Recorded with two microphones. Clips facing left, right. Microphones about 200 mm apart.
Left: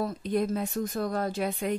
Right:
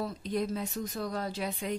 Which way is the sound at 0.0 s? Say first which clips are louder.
Left 4 dB; 55° left (ahead or behind).